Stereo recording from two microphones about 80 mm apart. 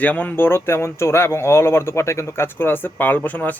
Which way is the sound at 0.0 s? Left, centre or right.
Centre.